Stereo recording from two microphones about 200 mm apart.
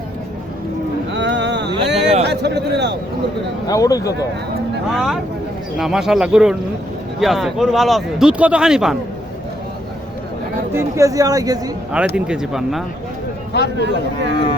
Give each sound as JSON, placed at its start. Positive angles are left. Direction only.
{"t": 1.1, "sound": "boat", "side_deg": -60}
{"t": 2.2, "sound": "a sound", "side_deg": -55}
{"t": 3.7, "sound": "speech", "side_deg": 15}
{"t": 4.9, "sound": "speech", "side_deg": 0}
{"t": 10.7, "sound": "speech", "side_deg": -15}
{"t": 11.9, "sound": "speech", "side_deg": -5}
{"t": 13.7, "sound": "speech", "side_deg": -60}